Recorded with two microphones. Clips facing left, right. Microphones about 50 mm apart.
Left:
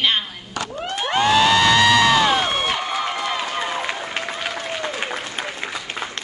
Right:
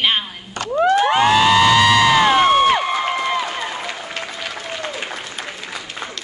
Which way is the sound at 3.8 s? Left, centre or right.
Left.